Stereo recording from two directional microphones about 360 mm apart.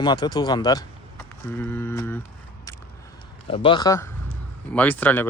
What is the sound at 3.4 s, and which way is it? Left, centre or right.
Speech, centre.